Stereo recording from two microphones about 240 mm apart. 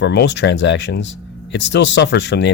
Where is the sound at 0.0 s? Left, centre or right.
Left.